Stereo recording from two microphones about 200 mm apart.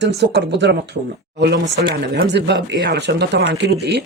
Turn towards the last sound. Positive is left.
turn(degrees=-60)  # may be behind; listen again after turning